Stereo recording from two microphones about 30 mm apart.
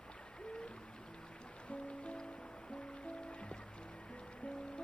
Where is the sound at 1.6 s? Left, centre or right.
Left.